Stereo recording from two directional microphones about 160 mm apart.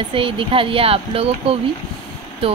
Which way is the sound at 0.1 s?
35° right (ahead or behind).